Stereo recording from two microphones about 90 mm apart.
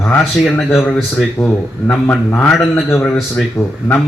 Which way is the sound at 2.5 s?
Centre (ahead or behind).